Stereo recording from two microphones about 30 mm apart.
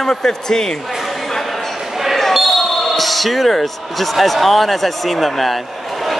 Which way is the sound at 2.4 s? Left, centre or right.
Centre.